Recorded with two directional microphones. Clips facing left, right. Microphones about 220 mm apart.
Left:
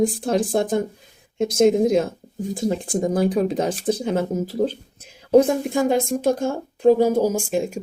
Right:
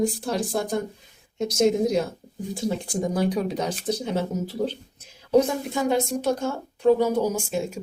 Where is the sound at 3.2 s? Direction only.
50° left (ahead or behind).